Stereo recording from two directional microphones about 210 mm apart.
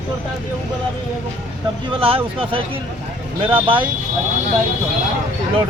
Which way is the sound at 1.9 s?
25° right (ahead or behind).